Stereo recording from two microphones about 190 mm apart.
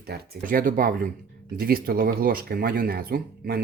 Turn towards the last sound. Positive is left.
turn(degrees=-55)  # may be behind; listen again after turning